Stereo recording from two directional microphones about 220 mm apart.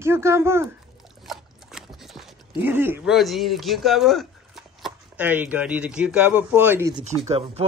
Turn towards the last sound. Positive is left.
turn(degrees=-30)  # may be behind; listen again after turning